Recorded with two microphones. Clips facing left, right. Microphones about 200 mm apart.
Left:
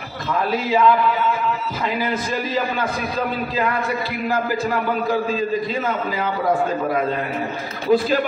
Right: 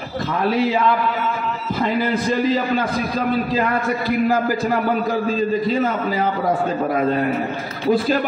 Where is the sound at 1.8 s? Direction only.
50° right (ahead or behind).